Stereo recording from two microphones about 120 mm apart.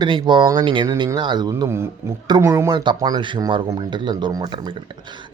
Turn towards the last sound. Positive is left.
turn(degrees=-35)  # may be behind; listen again after turning